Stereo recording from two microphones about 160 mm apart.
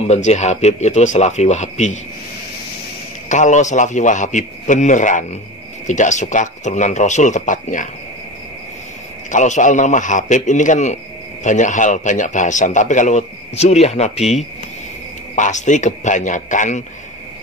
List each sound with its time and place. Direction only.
0.0 s a man's voice: 45° left (ahead or behind)
3.3 s a man's voice: 50° left (ahead or behind)
9.3 s a man's voice: 50° left (ahead or behind)
15.3 s a man's voice: 50° left (ahead or behind)